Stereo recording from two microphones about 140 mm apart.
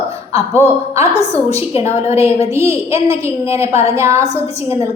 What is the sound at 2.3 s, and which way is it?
A woman's voice, 20° right (ahead or behind).